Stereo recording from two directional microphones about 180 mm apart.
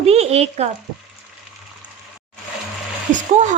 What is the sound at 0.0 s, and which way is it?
Speech, 35° right (ahead or behind).